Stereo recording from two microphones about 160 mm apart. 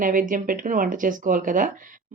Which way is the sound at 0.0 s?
55° right (ahead or behind).